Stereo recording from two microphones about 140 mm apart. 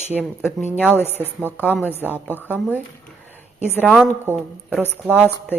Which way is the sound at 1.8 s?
15° left (ahead or behind).